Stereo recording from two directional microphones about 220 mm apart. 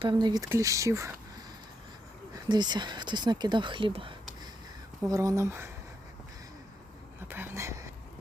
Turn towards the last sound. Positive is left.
turn(degrees=-10)  # may be behind; listen again after turning